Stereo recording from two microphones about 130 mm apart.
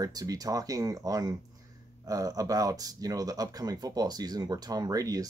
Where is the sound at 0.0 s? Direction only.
30° right (ahead or behind).